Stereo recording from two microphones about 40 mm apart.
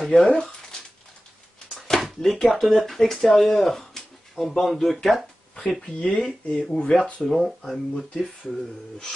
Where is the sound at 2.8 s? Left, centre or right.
Centre.